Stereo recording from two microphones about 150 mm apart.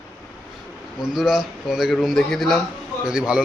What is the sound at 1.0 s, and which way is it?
A man's voice, 5° right (ahead or behind).